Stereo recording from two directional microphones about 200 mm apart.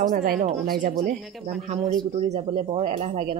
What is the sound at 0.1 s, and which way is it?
Speech, 40° right (ahead or behind).